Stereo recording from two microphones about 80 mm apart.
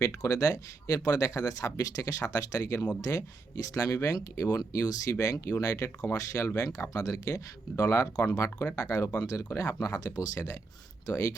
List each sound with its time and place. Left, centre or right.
0.0 s speech: left